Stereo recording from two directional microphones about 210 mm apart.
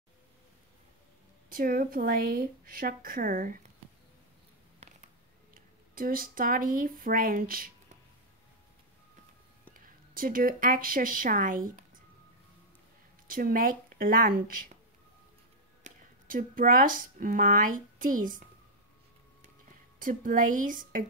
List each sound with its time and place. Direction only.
1.5 s speech: 45° right (ahead or behind)
4.7 s a sound: 35° right (ahead or behind)
9.8 s speech: 40° right (ahead or behind)
13.3 s speech: 40° right (ahead or behind)
15.8 s speech: 40° right (ahead or behind)
20.0 s a woman's voice: 40° right (ahead or behind)